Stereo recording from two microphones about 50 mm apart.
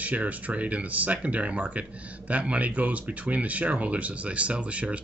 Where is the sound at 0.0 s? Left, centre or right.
Right.